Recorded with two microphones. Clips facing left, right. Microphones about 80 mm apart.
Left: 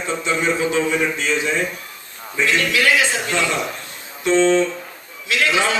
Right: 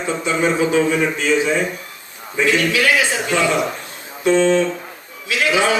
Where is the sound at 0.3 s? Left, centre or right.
Centre.